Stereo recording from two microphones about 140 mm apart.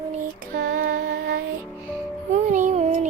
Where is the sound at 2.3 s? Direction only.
65° right (ahead or behind).